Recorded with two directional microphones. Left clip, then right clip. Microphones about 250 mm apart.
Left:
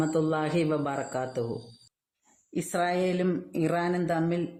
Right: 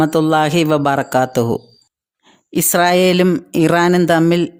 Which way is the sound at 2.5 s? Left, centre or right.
Right.